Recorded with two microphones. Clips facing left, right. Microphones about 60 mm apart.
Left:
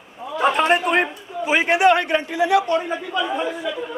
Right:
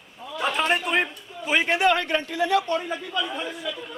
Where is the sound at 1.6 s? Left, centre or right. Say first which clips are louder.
Left 7 dB; centre.